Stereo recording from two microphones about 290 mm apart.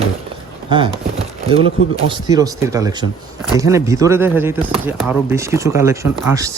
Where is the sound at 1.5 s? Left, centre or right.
Centre.